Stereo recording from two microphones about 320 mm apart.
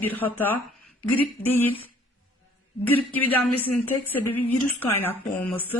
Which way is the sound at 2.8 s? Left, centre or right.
Centre.